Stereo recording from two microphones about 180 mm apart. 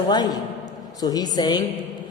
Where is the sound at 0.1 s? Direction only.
25° left (ahead or behind).